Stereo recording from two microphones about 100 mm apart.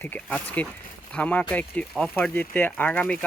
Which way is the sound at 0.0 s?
20° left (ahead or behind).